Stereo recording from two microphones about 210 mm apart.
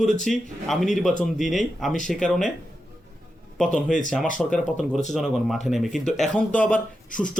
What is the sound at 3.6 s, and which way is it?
A man's voice, 5° left (ahead or behind).